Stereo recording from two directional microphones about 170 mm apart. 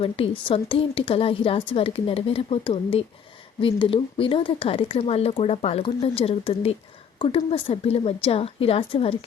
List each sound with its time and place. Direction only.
0.0 s speech: 30° left (ahead or behind)